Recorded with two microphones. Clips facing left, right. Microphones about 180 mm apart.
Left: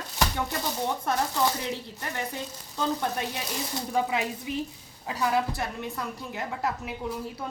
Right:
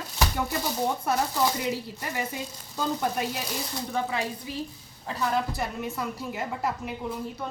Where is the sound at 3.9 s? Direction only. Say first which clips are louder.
Left 2 dB; 15° left (ahead or behind).